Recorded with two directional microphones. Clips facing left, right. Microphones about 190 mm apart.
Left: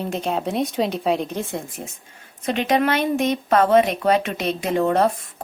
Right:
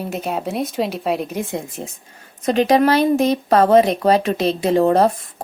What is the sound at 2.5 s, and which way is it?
Speech, 35° right (ahead or behind).